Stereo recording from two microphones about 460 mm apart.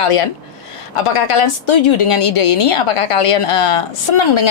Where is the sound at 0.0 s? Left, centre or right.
Left.